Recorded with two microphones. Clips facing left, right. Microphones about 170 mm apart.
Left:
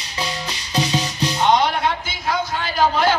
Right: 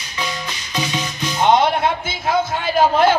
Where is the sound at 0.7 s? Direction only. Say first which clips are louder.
Left 3 dB; 35° left (ahead or behind).